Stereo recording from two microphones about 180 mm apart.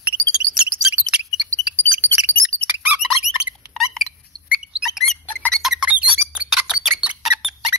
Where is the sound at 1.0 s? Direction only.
5° right (ahead or behind).